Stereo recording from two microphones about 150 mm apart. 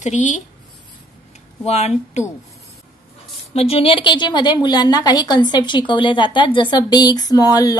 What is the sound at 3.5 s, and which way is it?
A woman's voice, 40° left (ahead or behind).